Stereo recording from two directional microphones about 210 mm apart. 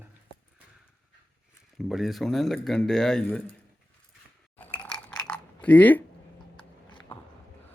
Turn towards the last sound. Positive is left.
turn(degrees=5)  # may be behind; listen again after turning